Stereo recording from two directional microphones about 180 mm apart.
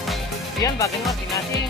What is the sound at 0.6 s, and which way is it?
Speech, 15° left (ahead or behind).